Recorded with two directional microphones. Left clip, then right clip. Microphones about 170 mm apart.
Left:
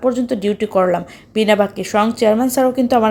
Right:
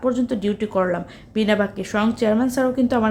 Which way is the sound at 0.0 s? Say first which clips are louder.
Left 4 dB; 15° left (ahead or behind).